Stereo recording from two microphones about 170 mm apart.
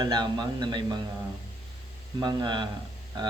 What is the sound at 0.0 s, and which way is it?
Speech, 25° right (ahead or behind).